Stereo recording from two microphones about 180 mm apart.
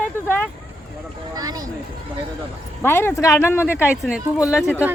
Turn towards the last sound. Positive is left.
turn(degrees=-5)  # may be behind; listen again after turning